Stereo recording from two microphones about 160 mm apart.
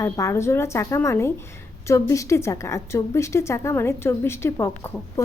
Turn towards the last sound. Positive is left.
turn(degrees=15)  # may be behind; listen again after turning